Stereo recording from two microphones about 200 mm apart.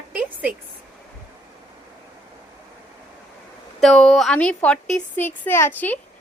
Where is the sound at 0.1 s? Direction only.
10° right (ahead or behind).